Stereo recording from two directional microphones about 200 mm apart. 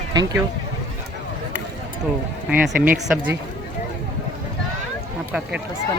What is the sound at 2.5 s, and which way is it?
Speech, 5° right (ahead or behind).